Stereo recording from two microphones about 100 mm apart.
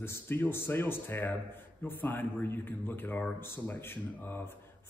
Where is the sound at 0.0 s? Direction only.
25° left (ahead or behind).